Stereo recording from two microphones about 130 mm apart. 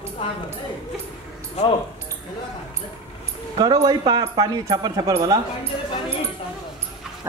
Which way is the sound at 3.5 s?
30° right (ahead or behind).